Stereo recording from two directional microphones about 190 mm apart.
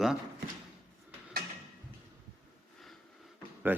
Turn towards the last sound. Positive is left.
turn(degrees=-10)  # may be behind; listen again after turning